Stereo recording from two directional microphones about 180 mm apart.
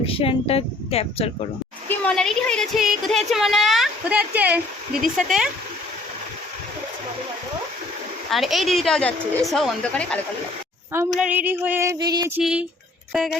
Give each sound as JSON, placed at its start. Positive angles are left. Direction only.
{"t": 0.0, "sound": "a woman's voice", "side_deg": 30}
{"t": 1.9, "sound": "speech", "side_deg": 5}
{"t": 8.3, "sound": "speech", "side_deg": 0}
{"t": 11.1, "sound": "a sound", "side_deg": -5}
{"t": 12.4, "sound": "speech", "side_deg": -5}